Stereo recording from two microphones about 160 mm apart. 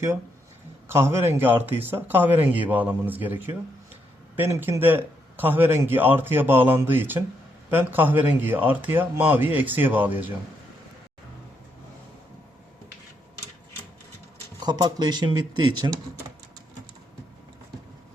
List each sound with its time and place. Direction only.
1.1 s a man's voice: 15° right (ahead or behind)
14.6 s speech: 25° right (ahead or behind)